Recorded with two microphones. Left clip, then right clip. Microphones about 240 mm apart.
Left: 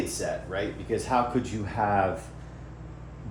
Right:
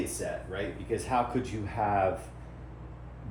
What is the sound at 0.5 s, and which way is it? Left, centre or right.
Speech, left.